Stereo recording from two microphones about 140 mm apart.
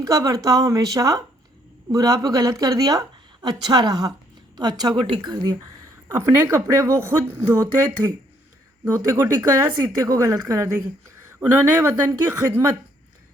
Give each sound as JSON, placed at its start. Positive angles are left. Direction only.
{"t": 0.0, "sound": "speech", "side_deg": -25}